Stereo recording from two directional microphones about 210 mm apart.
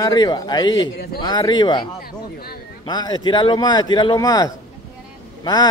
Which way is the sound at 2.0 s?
45° left (ahead or behind).